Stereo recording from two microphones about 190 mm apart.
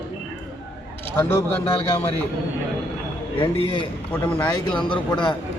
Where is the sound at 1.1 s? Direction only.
10° left (ahead or behind).